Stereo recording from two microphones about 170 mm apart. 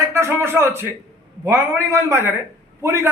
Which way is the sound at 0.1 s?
15° right (ahead or behind).